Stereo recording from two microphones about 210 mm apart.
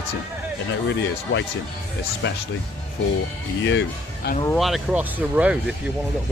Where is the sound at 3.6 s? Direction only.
60° left (ahead or behind).